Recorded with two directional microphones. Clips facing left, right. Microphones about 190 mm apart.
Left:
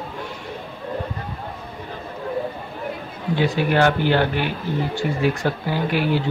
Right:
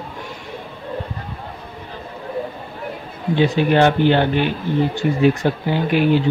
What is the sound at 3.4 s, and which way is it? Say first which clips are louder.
Speech: right 4 dB; 25° right (ahead or behind).